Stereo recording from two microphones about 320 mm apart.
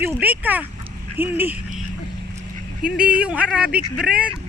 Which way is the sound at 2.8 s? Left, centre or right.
Centre.